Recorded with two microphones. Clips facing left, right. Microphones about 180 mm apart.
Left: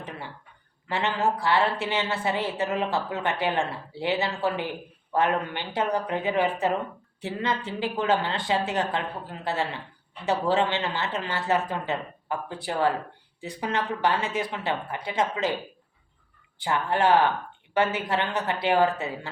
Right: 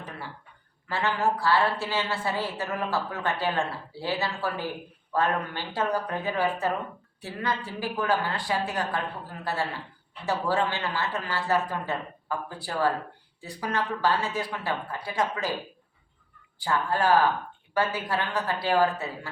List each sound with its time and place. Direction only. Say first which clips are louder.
0.9 s a woman's voice: left 1 dB; 20° left (ahead or behind)
16.6 s a woman's voice: left 1 dB; 20° left (ahead or behind)